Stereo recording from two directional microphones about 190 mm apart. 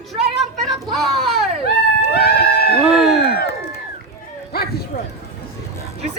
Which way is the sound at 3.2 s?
55° left (ahead or behind).